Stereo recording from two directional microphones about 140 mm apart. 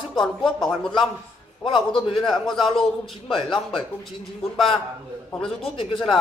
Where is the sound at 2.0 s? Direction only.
35° left (ahead or behind).